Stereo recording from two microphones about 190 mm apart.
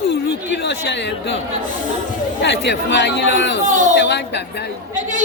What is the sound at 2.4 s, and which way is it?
Speech, 65° left (ahead or behind).